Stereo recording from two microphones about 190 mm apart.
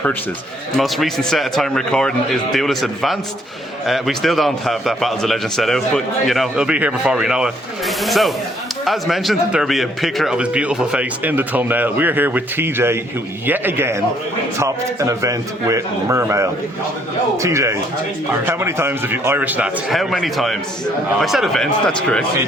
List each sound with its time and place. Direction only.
0.8 s a man's voice: centre (ahead or behind)